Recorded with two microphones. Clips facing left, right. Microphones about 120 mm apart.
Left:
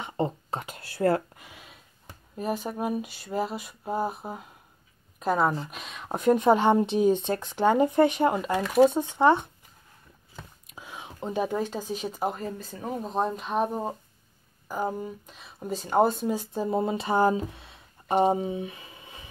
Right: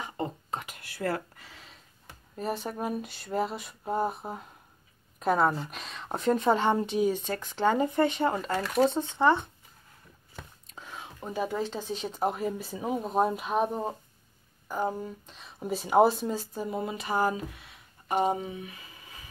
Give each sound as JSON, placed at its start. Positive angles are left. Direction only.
{"t": 0.0, "sound": "a sound", "side_deg": 30}
{"t": 2.3, "sound": "a woman's voice", "side_deg": 5}
{"t": 10.7, "sound": "speech", "side_deg": 10}
{"t": 16.5, "sound": "speech", "side_deg": 30}